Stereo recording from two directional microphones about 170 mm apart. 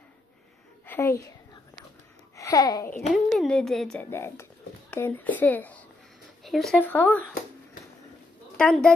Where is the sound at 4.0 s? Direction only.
15° left (ahead or behind).